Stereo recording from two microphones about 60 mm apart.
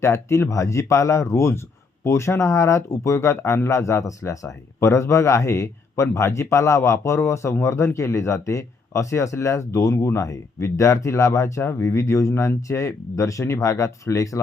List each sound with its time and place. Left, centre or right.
0.0 s a man's voice: left